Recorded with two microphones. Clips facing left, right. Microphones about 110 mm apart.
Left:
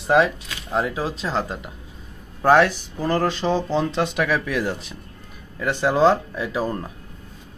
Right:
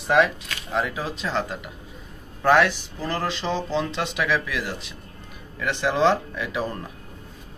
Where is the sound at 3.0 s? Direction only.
50° left (ahead or behind); by 6.8 s 30° left (ahead or behind).